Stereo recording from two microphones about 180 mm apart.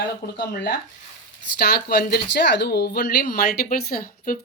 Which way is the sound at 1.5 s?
60° left (ahead or behind).